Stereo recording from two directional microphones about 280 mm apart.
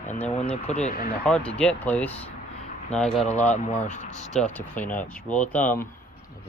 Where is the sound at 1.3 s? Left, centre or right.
Centre.